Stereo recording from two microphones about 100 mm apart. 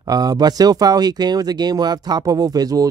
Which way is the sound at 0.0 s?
40° right (ahead or behind).